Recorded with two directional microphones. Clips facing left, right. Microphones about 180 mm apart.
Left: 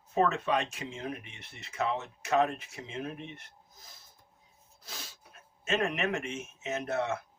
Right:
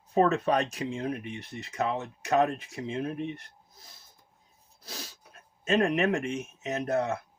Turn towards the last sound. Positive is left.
turn(degrees=-35)  # may be behind; listen again after turning